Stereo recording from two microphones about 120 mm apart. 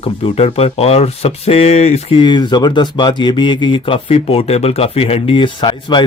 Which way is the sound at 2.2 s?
40° left (ahead or behind).